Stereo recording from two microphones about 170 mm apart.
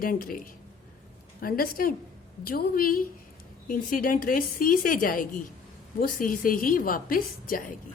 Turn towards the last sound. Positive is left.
turn(degrees=55)  # may be behind; listen again after turning